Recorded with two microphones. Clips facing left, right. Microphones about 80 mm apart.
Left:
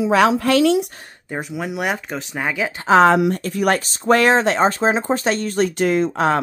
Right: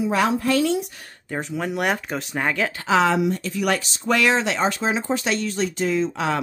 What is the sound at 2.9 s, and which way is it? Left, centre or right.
Speech, left.